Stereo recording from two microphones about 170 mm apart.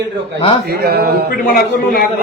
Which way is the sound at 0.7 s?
70° right (ahead or behind).